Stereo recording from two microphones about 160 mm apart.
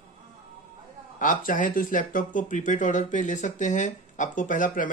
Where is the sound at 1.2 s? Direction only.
60° left (ahead or behind).